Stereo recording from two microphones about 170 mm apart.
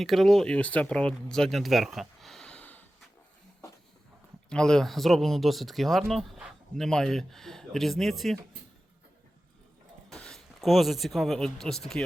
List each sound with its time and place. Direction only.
0.0 s speech: centre (ahead or behind)
4.4 s speech: 5° left (ahead or behind)
10.1 s speech: 5° left (ahead or behind)